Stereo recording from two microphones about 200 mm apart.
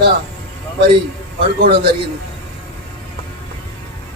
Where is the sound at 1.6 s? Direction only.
50° right (ahead or behind).